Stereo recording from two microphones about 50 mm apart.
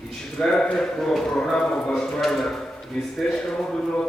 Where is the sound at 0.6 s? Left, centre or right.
Centre.